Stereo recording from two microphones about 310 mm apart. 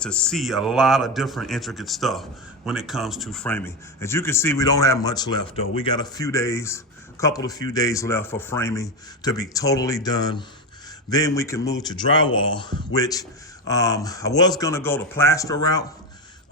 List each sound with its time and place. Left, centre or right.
0.0 s speech: centre